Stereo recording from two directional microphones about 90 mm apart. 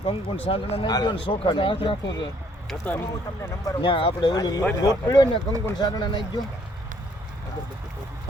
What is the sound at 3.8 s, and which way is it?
Speech, 75° left (ahead or behind).